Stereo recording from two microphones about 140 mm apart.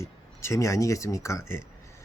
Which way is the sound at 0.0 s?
20° left (ahead or behind).